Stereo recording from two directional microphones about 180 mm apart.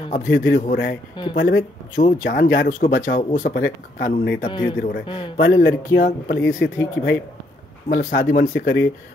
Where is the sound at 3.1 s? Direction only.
45° left (ahead or behind).